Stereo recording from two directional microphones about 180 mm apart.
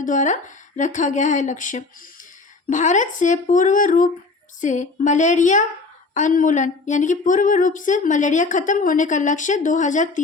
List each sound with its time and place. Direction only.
0.0 s speech: 45° left (ahead or behind)